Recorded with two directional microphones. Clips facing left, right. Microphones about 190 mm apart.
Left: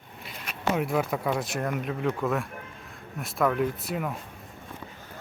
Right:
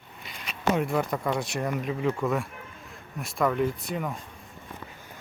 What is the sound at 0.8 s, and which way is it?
Speech, 5° left (ahead or behind).